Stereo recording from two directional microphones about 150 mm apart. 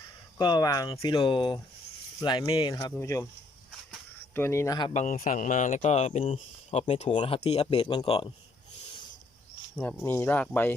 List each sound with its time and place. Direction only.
0.3 s speech: 25° left (ahead or behind)
2.9 s speech: 20° left (ahead or behind)
4.4 s speech: 15° left (ahead or behind)
4.9 s speech: 60° left (ahead or behind); by 8.3 s 35° left (ahead or behind)
9.8 s speech: 15° left (ahead or behind)